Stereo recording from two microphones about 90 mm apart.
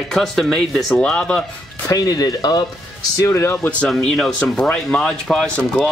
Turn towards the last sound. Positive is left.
turn(degrees=5)  # may be behind; listen again after turning